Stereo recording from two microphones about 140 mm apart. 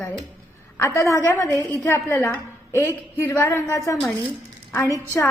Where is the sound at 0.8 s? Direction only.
20° left (ahead or behind).